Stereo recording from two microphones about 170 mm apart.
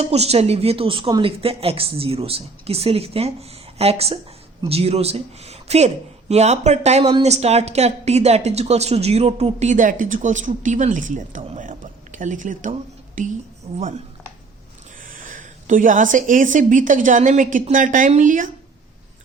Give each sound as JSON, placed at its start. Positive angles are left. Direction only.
{"t": 0.0, "sound": "a woman's voice", "side_deg": -40}
{"t": 15.0, "sound": "a woman's voice", "side_deg": -55}